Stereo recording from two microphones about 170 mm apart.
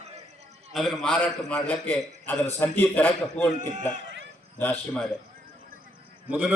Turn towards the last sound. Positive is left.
turn(degrees=-5)  # may be behind; listen again after turning